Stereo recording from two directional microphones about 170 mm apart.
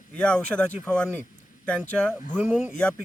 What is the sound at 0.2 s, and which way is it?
Speech, 5° left (ahead or behind).